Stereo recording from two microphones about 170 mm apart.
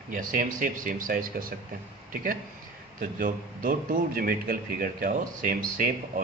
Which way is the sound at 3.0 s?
55° right (ahead or behind).